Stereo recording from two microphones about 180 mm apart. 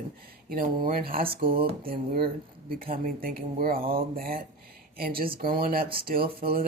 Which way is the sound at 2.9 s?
55° right (ahead or behind).